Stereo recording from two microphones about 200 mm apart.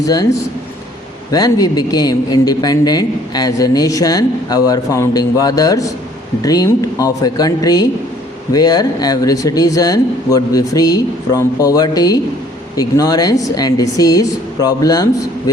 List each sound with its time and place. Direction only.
0.0 s a man's voice: 20° left (ahead or behind)